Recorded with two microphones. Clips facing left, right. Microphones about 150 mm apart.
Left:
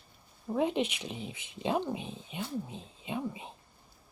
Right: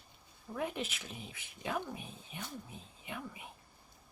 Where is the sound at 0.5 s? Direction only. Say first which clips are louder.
Left 9 dB; 20° left (ahead or behind).